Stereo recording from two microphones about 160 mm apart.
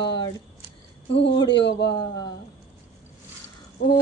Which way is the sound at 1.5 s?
90° left.